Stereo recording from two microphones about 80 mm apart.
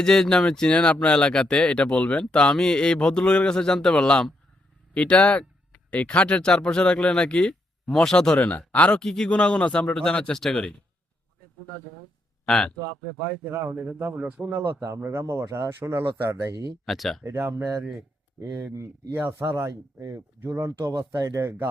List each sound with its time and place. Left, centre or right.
0.0 s speech: centre
8.4 s speech: centre
13.2 s a man's voice: right
16.8 s speech: centre
17.2 s speech: right
19.1 s speech: right